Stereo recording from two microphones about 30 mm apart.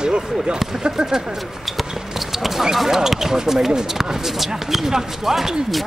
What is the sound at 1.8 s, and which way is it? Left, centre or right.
Speech, centre.